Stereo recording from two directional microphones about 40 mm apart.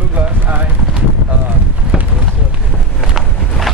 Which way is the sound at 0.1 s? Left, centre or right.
Right.